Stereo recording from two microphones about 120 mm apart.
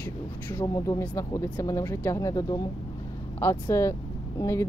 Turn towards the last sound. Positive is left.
turn(degrees=25)  # may be behind; listen again after turning